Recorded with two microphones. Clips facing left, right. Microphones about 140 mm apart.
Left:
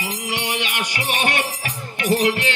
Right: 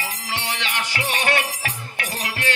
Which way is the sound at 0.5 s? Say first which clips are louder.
Left 2 dB; 15° left (ahead or behind).